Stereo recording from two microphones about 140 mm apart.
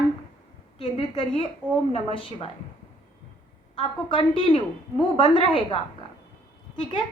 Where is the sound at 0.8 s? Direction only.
40° left (ahead or behind).